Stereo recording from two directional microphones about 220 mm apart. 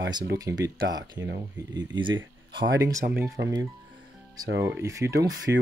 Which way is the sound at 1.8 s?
20° right (ahead or behind).